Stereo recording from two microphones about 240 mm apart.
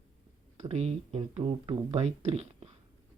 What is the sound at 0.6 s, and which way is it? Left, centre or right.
Speech, right.